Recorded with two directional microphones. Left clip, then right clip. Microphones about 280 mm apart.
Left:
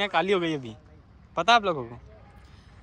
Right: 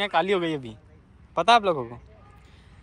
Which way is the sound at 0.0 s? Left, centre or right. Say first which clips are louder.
Right 1 dB; centre.